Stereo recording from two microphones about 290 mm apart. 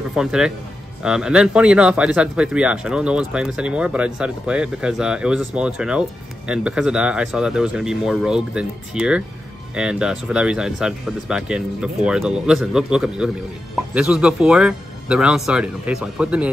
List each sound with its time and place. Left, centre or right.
0.1 s speech: centre